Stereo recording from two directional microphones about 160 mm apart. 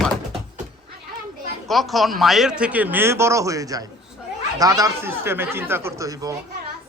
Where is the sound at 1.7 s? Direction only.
Centre (ahead or behind); by 6.4 s 20° right (ahead or behind).